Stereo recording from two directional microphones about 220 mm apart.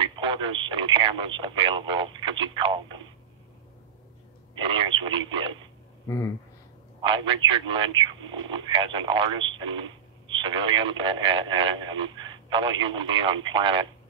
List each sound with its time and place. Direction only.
0.0 s speech: 20° right (ahead or behind)
4.6 s speech: 20° right (ahead or behind)
6.0 s speech: 15° left (ahead or behind)
7.0 s speech: 20° right (ahead or behind)